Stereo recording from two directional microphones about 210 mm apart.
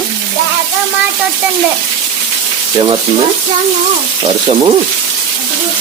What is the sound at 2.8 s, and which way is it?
Speech, 25° right (ahead or behind).